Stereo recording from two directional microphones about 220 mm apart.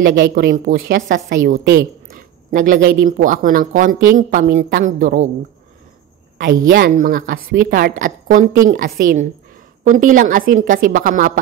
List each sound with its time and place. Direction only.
0.0 s speech: 60° right (ahead or behind)
0.3 s a woman's voice: 40° right (ahead or behind)
1.6 s a sound: 45° right (ahead or behind)
3.0 s a woman's voice: 35° right (ahead or behind)
6.4 s a woman's voice: 40° right (ahead or behind)